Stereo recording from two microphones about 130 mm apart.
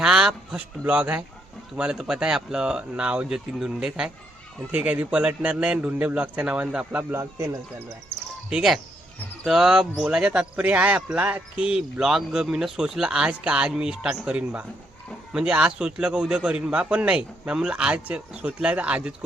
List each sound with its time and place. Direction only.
0.0 s a man's voice: 5° right (ahead or behind)
7.1 s speech: 20° right (ahead or behind)
8.4 s a man's voice: 5° right (ahead or behind)